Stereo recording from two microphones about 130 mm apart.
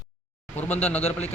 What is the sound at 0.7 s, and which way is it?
Speech, 15° left (ahead or behind).